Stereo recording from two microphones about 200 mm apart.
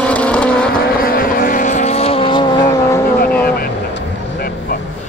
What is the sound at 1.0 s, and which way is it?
Vehicle, 45° left (ahead or behind).